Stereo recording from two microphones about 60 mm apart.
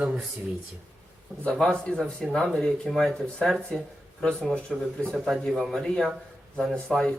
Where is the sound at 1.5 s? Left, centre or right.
Centre.